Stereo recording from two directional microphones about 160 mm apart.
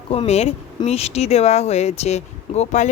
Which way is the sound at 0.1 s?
40° left (ahead or behind).